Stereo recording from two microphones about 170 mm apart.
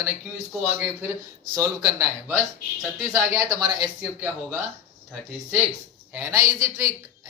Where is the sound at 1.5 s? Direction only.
20° right (ahead or behind).